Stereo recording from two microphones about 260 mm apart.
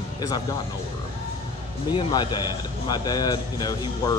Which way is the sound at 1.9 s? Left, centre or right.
Centre.